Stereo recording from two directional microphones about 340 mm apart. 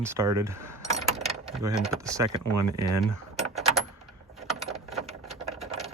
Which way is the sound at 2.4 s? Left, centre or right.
Right.